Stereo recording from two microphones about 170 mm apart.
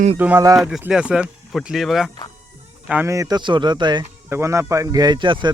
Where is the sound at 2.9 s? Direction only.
15° right (ahead or behind).